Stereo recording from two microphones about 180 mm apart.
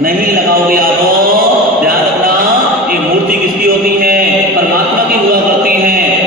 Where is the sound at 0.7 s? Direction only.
55° right (ahead or behind).